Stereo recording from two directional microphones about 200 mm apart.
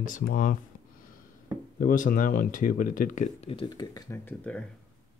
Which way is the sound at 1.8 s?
40° left (ahead or behind).